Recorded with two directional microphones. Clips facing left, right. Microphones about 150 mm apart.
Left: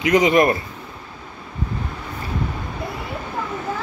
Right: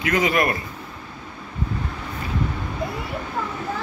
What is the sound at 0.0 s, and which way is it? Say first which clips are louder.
Speech: left 5 dB; 20° left (ahead or behind).